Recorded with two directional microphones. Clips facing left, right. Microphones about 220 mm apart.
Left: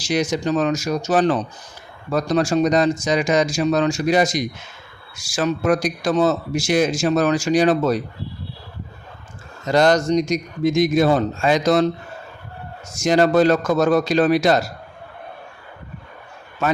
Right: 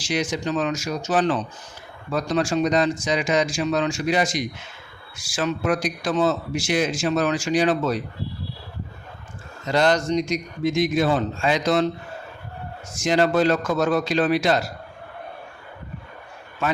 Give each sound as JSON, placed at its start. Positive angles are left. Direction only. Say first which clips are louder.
{"t": 0.0, "sound": "speech", "louder": "left 4 dB", "side_deg": 40}
{"t": 9.6, "sound": "a man's voice", "louder": "left 4 dB", "side_deg": 45}
{"t": 12.9, "sound": "a man's voice", "louder": "left 4 dB", "side_deg": 40}